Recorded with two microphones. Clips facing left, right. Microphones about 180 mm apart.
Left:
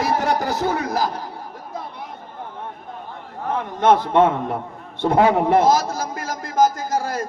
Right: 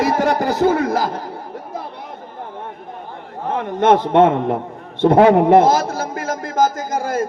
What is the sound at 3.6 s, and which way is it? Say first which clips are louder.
A man's voice: right 3 dB; 55° right (ahead or behind).